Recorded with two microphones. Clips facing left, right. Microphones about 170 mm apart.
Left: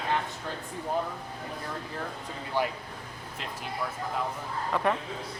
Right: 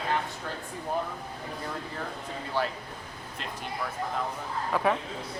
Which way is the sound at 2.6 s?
15° left (ahead or behind).